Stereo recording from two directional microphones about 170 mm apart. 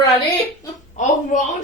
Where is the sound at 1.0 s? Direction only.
45° left (ahead or behind).